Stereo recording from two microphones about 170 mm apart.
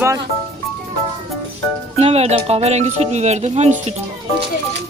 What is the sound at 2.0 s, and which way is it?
Speech, 35° right (ahead or behind).